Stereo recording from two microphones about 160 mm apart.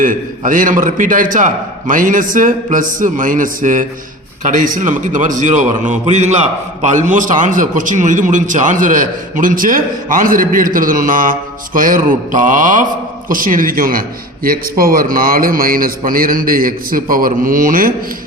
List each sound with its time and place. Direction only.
0.0 s a man's voice: 55° right (ahead or behind)